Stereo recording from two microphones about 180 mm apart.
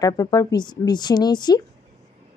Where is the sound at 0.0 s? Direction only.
20° left (ahead or behind).